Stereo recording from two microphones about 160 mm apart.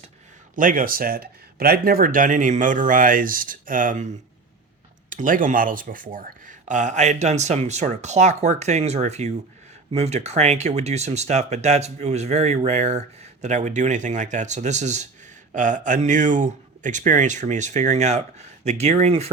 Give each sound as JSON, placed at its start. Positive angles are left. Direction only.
{"t": 0.5, "sound": "speech", "side_deg": -60}